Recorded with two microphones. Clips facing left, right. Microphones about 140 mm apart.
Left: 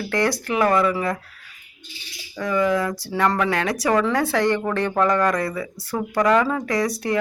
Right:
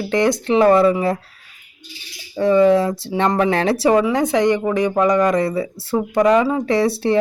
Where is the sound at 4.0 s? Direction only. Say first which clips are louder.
Right 4 dB; 15° right (ahead or behind).